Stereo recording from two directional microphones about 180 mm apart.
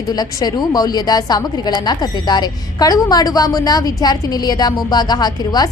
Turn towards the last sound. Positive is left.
turn(degrees=20)  # may be behind; listen again after turning